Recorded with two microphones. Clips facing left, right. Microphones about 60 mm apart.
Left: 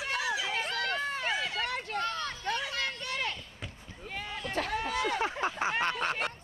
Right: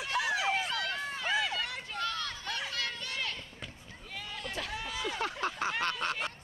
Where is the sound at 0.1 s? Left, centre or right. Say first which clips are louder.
Right 2 dB; right.